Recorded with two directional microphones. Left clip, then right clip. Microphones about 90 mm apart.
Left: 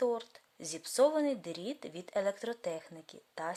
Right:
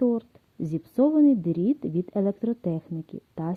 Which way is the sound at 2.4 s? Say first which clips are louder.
Right 7 dB; 50° right (ahead or behind).